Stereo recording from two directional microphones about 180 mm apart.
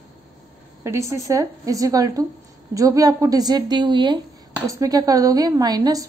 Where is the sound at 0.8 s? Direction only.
15° right (ahead or behind).